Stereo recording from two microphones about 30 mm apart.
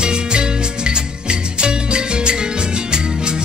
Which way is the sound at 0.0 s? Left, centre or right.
Right.